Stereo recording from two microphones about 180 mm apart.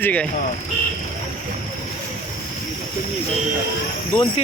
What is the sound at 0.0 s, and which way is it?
Speech, 10° left (ahead or behind).